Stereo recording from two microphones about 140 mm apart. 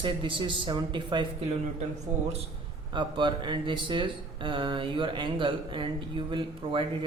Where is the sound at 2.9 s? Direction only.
35° right (ahead or behind).